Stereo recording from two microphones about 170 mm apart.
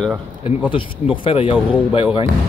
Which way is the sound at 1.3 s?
35° left (ahead or behind).